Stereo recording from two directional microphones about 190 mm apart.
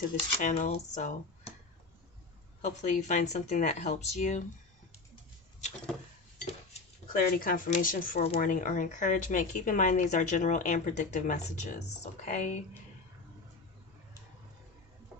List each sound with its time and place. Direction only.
0.4 s speech: 35° left (ahead or behind)
2.6 s speech: 40° left (ahead or behind)
7.1 s speech: 50° left (ahead or behind)